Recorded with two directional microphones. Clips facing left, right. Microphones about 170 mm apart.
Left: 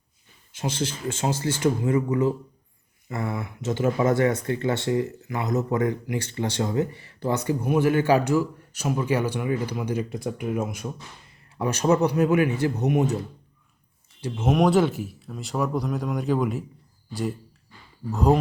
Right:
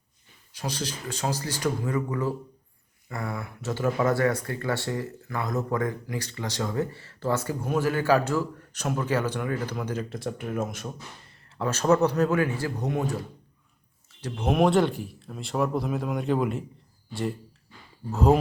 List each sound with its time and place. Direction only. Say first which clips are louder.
0.5 s speech: left 4 dB; 25° left (ahead or behind)
14.2 s speech: left 1 dB; 5° left (ahead or behind)